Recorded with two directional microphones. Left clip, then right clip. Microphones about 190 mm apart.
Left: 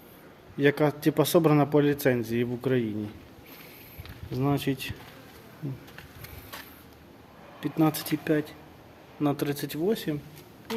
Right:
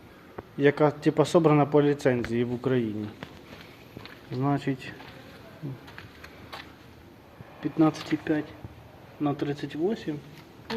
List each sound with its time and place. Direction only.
0.5 s speech: 20° left (ahead or behind)
4.4 s speech: 25° left (ahead or behind)
7.6 s speech: 25° left (ahead or behind)